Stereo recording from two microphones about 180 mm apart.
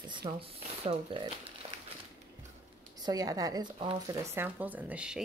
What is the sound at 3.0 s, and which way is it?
Speech, 20° right (ahead or behind).